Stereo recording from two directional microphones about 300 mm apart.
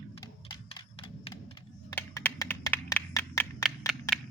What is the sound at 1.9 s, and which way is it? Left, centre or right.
Computer keyboard, centre.